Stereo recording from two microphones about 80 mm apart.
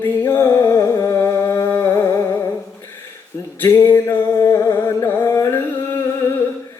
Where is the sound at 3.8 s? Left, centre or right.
Left.